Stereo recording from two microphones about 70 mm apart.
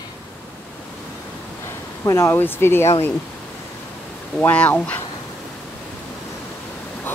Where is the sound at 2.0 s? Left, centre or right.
Left.